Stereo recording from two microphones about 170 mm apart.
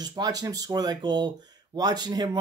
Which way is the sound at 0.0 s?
25° right (ahead or behind).